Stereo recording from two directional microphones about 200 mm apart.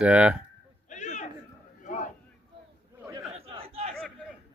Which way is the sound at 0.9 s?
35° left (ahead or behind).